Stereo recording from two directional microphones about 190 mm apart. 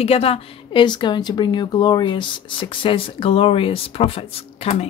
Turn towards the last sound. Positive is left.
turn(degrees=35)  # may be behind; listen again after turning